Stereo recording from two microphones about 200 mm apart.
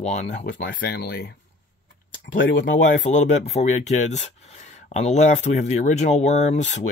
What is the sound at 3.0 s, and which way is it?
Speech, 35° left (ahead or behind).